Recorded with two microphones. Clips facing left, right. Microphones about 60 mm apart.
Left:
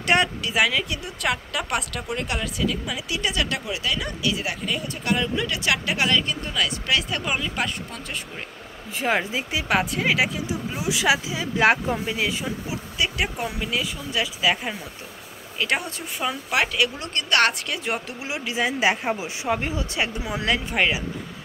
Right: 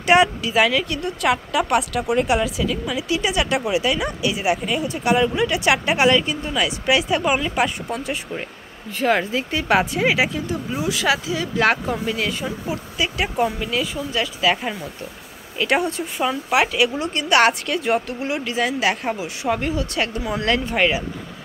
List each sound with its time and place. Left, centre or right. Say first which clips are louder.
0.0 s a woman's voice: right 6 dB; centre
3.3 s speech: right 4 dB; centre
8.9 s a woman's voice: right 4 dB; centre
10.8 s a woman's voice: even; centre
17.6 s a woman's voice: right 7 dB; centre
18.7 s speech: right 1 dB; left; by 21.0 s centre